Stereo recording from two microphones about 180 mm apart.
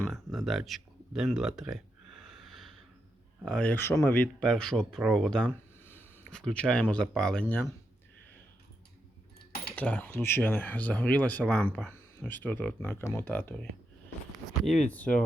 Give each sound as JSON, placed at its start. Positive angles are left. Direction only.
{"t": 0.0, "sound": "speech", "side_deg": 0}
{"t": 2.2, "sound": "snort", "side_deg": 0}
{"t": 3.4, "sound": "speech", "side_deg": 5}
{"t": 5.8, "sound": "a sound", "side_deg": 10}
{"t": 7.1, "sound": "speech", "side_deg": 5}
{"t": 9.7, "sound": "speech", "side_deg": 5}